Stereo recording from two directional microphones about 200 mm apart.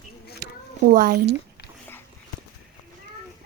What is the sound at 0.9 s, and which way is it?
Speech, 50° right (ahead or behind).